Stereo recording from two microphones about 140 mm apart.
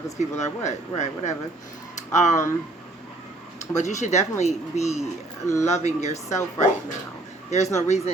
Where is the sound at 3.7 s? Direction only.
55° left (ahead or behind).